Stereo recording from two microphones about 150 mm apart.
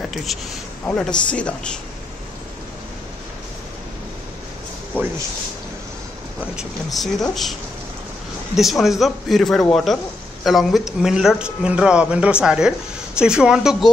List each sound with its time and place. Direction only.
0.1 s a man's voice: centre (ahead or behind)
4.9 s speech: 10° right (ahead or behind)
6.5 s speech: centre (ahead or behind)
8.5 s speech: centre (ahead or behind)